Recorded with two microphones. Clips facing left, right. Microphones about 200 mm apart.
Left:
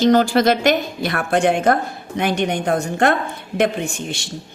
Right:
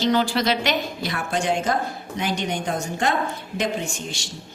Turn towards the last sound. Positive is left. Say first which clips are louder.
# left 5 dB
turn(degrees=60)  # may be behind; listen again after turning